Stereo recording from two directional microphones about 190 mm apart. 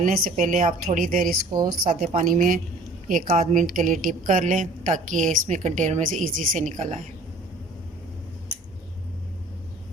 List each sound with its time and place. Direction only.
0.0 s speech: 45° right (ahead or behind)
1.5 s a woman's voice: 20° right (ahead or behind)
1.9 s a woman's voice: 40° right (ahead or behind)